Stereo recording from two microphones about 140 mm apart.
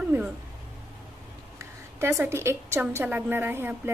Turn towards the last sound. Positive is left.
turn(degrees=-15)  # may be behind; listen again after turning